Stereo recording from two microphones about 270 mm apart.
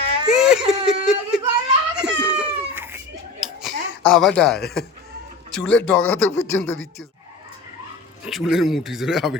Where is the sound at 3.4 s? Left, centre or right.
Centre.